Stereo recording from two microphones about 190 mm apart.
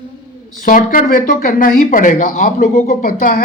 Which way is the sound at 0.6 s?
45° left (ahead or behind).